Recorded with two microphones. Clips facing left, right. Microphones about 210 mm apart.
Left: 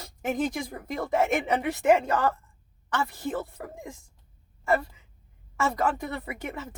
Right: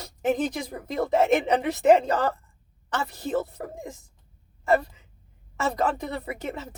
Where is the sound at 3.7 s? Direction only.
20° right (ahead or behind).